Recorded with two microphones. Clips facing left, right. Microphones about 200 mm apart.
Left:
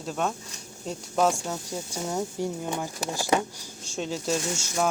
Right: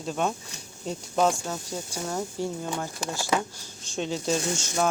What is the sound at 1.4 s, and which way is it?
Speech, 10° left (ahead or behind).